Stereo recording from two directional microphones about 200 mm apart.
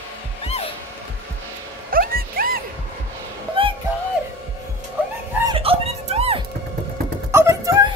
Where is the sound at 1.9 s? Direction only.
45° right (ahead or behind).